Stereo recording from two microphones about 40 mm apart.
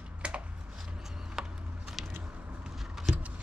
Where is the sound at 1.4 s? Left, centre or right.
Centre.